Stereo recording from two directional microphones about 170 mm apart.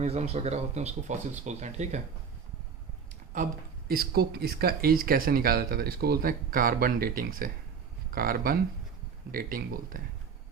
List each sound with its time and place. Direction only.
0.0 s speech: 40° right (ahead or behind)
3.3 s speech: 55° right (ahead or behind)